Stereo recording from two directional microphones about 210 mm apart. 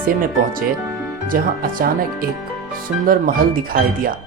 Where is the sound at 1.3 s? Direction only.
40° right (ahead or behind).